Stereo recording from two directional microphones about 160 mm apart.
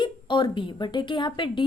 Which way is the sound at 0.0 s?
30° left (ahead or behind).